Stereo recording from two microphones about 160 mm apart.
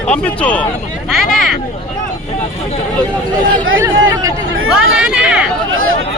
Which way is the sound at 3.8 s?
20° right (ahead or behind).